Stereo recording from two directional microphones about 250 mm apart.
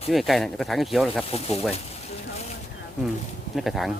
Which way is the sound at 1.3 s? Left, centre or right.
Left.